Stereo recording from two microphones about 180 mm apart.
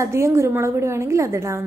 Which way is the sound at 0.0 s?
15° right (ahead or behind).